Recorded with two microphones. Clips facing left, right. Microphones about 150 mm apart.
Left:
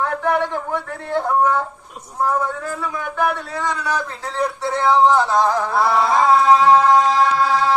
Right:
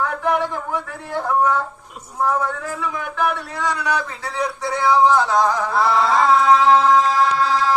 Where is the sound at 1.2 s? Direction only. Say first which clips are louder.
Even; 10° left (ahead or behind).